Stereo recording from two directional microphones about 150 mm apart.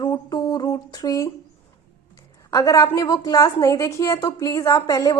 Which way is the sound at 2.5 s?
20° left (ahead or behind).